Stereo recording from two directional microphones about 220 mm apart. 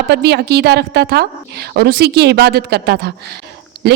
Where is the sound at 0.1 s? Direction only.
50° right (ahead or behind).